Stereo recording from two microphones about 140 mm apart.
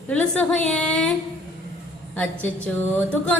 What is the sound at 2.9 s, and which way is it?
Speech, 10° left (ahead or behind).